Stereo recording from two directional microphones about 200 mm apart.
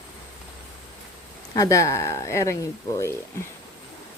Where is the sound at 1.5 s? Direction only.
15° left (ahead or behind).